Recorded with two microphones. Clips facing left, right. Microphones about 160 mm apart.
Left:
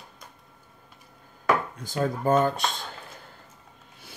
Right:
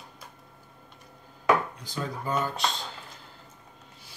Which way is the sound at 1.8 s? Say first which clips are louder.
Left 7 dB; 50° left (ahead or behind).